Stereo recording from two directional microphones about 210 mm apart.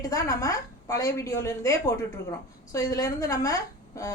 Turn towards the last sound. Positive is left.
turn(degrees=15)  # may be behind; listen again after turning